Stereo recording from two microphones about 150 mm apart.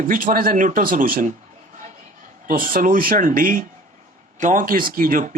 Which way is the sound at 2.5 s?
70° right (ahead or behind).